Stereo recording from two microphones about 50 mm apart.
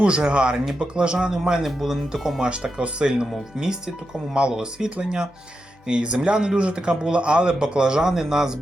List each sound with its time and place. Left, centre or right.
0.0 s speech: right
2.7 s speech: centre